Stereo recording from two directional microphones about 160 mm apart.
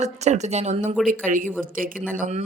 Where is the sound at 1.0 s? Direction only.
60° right (ahead or behind).